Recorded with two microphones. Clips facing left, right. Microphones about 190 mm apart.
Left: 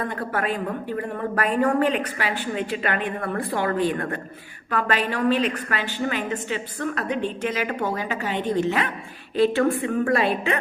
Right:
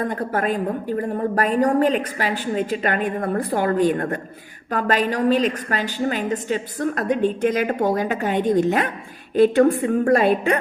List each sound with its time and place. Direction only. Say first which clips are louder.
0.0 s a woman's voice: right 4 dB; 40° right (ahead or behind)